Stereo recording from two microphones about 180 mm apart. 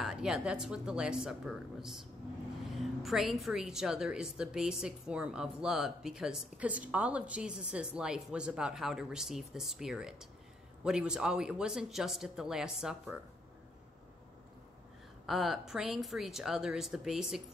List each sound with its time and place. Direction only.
0.0 s a woman's voice: 5° right (ahead or behind)
15.2 s a woman's voice: centre (ahead or behind)